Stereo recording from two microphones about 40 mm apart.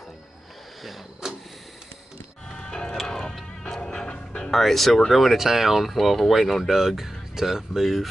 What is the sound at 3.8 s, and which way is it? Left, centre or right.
Music, left.